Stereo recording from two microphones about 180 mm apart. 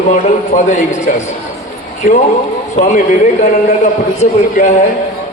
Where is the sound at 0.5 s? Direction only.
40° left (ahead or behind).